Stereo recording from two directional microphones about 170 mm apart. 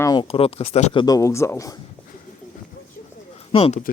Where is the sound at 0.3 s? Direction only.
35° left (ahead or behind).